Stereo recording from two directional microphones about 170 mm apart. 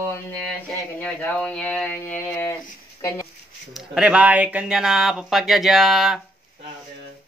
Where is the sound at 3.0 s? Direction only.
15° left (ahead or behind).